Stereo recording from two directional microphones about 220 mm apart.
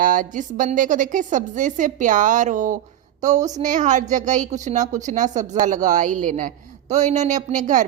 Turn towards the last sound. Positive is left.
turn(degrees=-35)  # may be behind; listen again after turning